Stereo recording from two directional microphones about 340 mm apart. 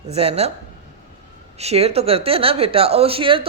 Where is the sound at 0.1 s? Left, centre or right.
Centre.